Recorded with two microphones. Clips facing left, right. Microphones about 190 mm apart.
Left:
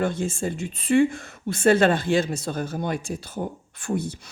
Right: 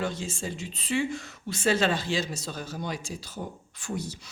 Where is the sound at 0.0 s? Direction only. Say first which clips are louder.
Left 7 dB; 55° left (ahead or behind).